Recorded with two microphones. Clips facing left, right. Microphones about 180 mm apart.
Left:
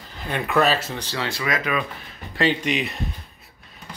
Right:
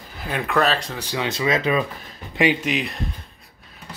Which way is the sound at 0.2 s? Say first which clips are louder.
Left 1 dB; centre (ahead or behind).